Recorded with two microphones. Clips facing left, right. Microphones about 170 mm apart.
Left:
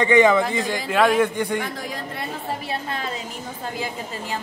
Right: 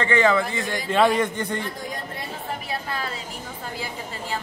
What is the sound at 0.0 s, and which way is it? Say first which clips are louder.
Speech: left 4 dB; 15° left (ahead or behind).